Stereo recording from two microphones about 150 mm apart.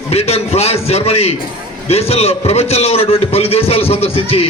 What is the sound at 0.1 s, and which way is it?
A man's voice, 45° left (ahead or behind).